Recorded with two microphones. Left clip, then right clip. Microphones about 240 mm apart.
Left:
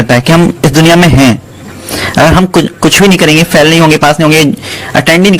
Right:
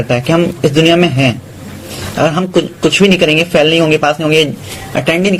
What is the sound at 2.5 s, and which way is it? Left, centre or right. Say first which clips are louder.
A man's voice: left 4 dB; left.